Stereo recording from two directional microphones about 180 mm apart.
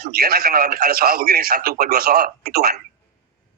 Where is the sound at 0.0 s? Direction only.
55° right (ahead or behind).